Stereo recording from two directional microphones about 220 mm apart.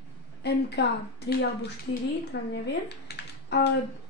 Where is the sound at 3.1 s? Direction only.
50° left (ahead or behind).